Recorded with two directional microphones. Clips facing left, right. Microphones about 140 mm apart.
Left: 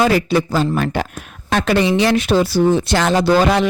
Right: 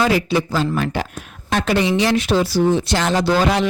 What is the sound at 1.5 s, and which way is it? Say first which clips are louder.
Speech: left 2 dB; 65° left (ahead or behind).